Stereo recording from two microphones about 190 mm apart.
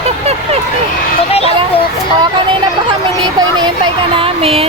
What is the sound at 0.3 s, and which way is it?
Vehicle, 35° right (ahead or behind).